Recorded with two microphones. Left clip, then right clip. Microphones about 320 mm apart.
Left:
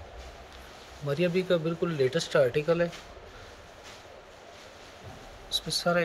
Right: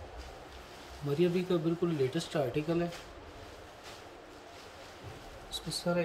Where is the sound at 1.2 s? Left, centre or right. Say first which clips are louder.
Left 4 dB; centre.